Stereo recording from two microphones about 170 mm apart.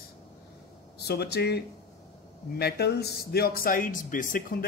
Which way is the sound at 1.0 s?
70° left (ahead or behind).